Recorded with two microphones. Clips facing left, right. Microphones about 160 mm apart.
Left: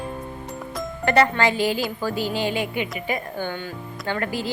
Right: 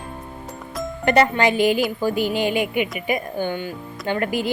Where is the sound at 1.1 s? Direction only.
20° right (ahead or behind).